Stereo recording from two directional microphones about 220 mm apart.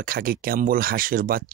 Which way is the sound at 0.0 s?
40° right (ahead or behind).